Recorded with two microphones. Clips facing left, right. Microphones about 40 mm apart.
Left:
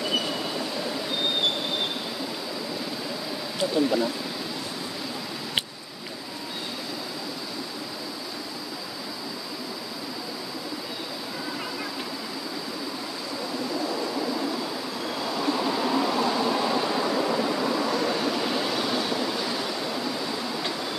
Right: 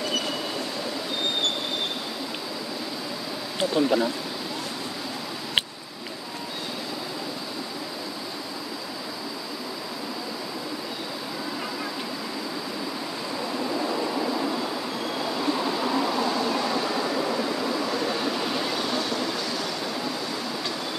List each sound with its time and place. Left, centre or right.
15.1 s vehicle: centre